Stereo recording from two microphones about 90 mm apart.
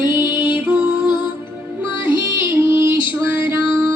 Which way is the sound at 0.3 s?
15° right (ahead or behind).